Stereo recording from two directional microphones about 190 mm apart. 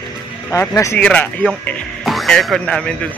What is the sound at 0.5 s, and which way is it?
Speech, 15° left (ahead or behind).